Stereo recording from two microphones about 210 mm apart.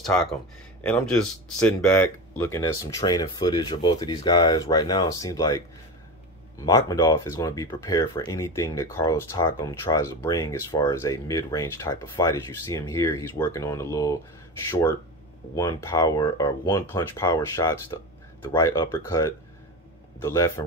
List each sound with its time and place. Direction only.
0.0 s speech: centre (ahead or behind); by 5.6 s 15° left (ahead or behind)
6.6 s speech: 15° left (ahead or behind)